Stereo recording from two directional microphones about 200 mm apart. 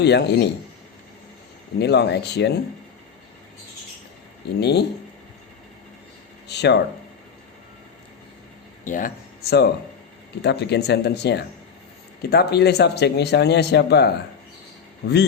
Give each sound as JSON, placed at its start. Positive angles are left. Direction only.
{"t": 0.0, "sound": "speech", "side_deg": 55}
{"t": 1.8, "sound": "speech", "side_deg": 55}
{"t": 4.6, "sound": "speech", "side_deg": 55}
{"t": 6.5, "sound": "speech", "side_deg": 60}
{"t": 8.8, "sound": "speech", "side_deg": 40}